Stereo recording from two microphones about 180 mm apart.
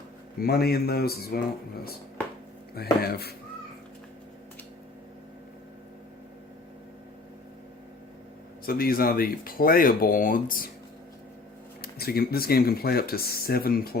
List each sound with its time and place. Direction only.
0.4 s speech: 60° left (ahead or behind)
8.6 s speech: 55° left (ahead or behind)
11.8 s speech: 60° left (ahead or behind)